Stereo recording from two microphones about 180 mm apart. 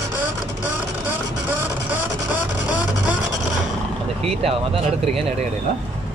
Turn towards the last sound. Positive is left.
turn(degrees=-35)  # may be behind; listen again after turning